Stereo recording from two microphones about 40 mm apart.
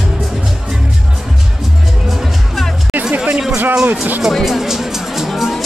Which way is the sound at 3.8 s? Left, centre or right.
Right.